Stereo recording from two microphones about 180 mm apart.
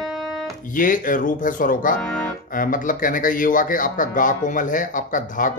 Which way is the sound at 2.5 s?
50° left (ahead or behind).